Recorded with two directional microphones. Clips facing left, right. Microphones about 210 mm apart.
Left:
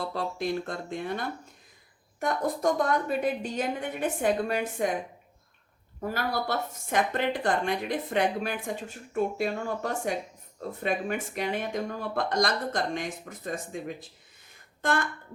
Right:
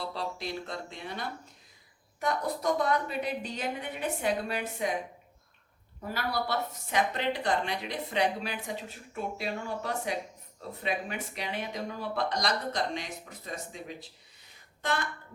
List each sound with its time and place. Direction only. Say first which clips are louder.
0.0 s a woman's voice: left 5 dB; 50° left (ahead or behind)
6.0 s a woman's voice: left 3 dB; 50° left (ahead or behind)